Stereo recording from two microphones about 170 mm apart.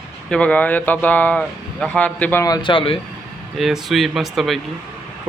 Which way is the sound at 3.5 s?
Centre (ahead or behind).